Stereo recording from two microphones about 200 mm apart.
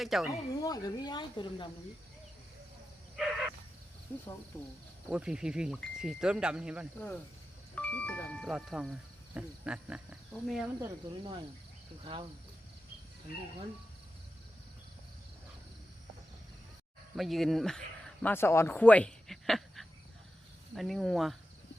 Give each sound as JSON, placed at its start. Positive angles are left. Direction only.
{"t": 0.0, "sound": "speech", "side_deg": 0}
{"t": 0.3, "sound": "speech", "side_deg": 20}
{"t": 3.2, "sound": "wild animals", "side_deg": 0}
{"t": 4.5, "sound": "speech", "side_deg": 15}
{"t": 5.0, "sound": "speech", "side_deg": -5}
{"t": 7.8, "sound": "speech", "side_deg": 5}
{"t": 10.8, "sound": "speech", "side_deg": -15}
{"t": 17.2, "sound": "speech", "side_deg": 0}